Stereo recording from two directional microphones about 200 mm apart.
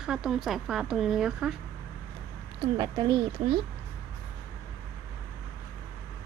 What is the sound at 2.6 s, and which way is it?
A woman's voice, 20° right (ahead or behind).